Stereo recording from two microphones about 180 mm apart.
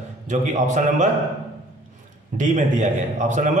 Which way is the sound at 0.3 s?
40° right (ahead or behind).